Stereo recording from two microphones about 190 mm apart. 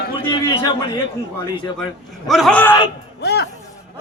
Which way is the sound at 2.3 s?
Centre (ahead or behind).